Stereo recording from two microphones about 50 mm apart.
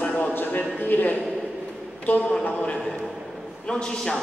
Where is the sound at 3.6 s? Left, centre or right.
Centre.